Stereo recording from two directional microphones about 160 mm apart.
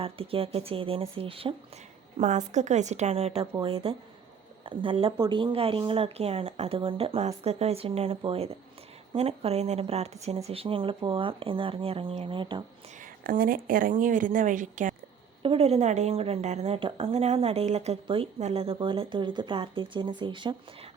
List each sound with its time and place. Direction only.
0.0 s a woman's voice: 35° right (ahead or behind)
2.1 s a woman's voice: 45° right (ahead or behind); by 12.6 s 30° right (ahead or behind)
13.0 s a woman's voice: 60° right (ahead or behind)
15.4 s a woman's voice: 40° right (ahead or behind)